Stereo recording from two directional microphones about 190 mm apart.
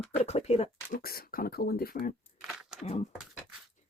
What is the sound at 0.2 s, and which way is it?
Speech, 35° left (ahead or behind).